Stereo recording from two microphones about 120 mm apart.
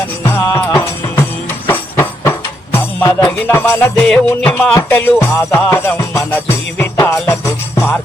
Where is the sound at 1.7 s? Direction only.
20° left (ahead or behind).